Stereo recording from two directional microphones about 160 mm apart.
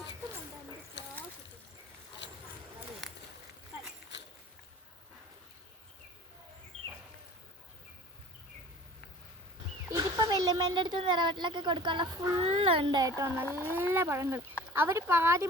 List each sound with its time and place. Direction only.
10.0 s a child's voice: 25° right (ahead or behind)